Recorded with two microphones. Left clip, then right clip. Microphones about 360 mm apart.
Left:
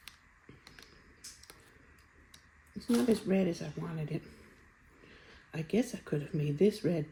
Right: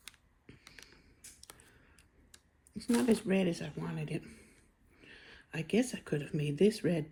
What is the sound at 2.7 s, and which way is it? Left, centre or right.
Speech, right.